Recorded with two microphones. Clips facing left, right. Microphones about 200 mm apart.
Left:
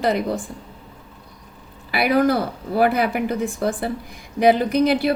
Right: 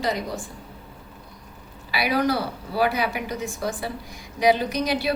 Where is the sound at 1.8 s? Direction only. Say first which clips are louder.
Left 5 dB; 50° left (ahead or behind).